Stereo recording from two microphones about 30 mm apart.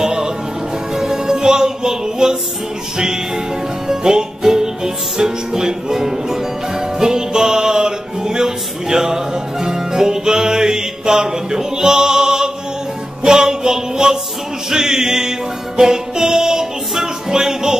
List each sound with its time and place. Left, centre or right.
0.0 s music: centre
3.8 s music: centre